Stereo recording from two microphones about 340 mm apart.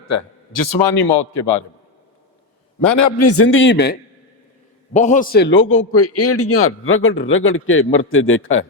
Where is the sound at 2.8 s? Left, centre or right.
Left.